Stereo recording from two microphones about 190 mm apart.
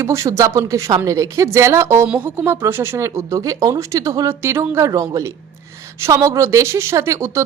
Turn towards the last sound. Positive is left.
turn(degrees=-15)  # may be behind; listen again after turning